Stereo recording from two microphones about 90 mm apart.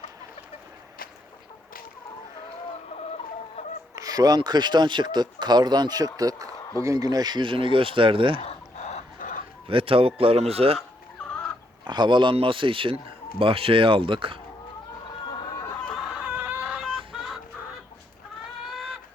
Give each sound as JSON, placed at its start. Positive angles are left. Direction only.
{"t": 3.9, "sound": "speech", "side_deg": -45}
{"t": 9.6, "sound": "speech", "side_deg": -85}
{"t": 11.3, "sound": "chicken", "side_deg": 15}
{"t": 11.9, "sound": "speech", "side_deg": -60}
{"t": 16.3, "sound": "a sound", "side_deg": -20}
{"t": 17.1, "sound": "chicken", "side_deg": -5}
{"t": 18.7, "sound": "chicken", "side_deg": -5}